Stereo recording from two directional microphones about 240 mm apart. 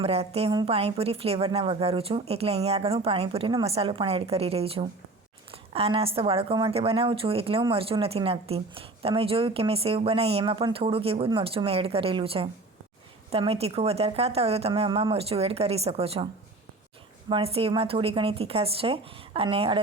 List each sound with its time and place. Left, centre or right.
0.0 s a woman's voice: right